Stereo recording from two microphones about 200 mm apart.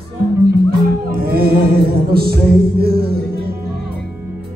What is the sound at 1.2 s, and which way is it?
Music, 50° right (ahead or behind).